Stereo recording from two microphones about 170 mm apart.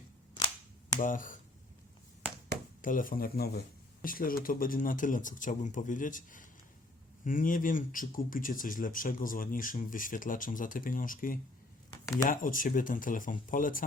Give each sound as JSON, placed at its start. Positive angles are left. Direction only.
{"t": 1.0, "sound": "speech", "side_deg": 50}
{"t": 2.8, "sound": "speech", "side_deg": 55}